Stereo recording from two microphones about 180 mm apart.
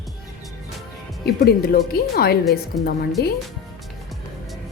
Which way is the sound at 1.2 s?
60° left (ahead or behind).